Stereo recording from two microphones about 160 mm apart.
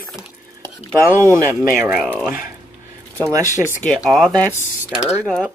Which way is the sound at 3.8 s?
Centre (ahead or behind).